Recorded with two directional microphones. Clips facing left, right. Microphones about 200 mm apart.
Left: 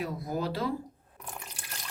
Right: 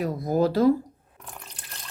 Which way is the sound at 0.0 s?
40° right (ahead or behind).